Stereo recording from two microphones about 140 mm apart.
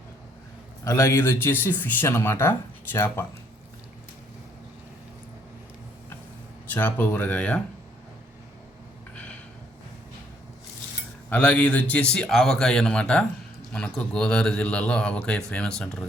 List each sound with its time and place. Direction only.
0.9 s speech: 20° left (ahead or behind)
6.7 s speech: 15° left (ahead or behind)
11.3 s a man's voice: 10° left (ahead or behind)